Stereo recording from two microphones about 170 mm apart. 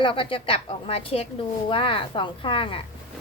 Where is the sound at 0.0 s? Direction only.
30° left (ahead or behind).